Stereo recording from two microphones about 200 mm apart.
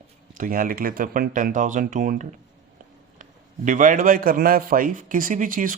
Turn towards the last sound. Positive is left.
turn(degrees=-45)  # may be behind; listen again after turning